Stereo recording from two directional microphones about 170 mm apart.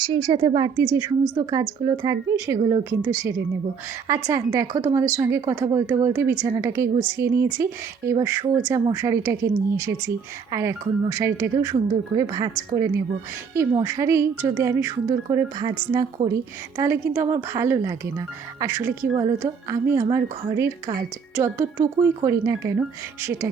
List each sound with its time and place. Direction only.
0.0 s a woman's voice: 25° right (ahead or behind)
4.3 s a woman's voice: 20° right (ahead or behind)
10.5 s a woman's voice: 15° right (ahead or behind)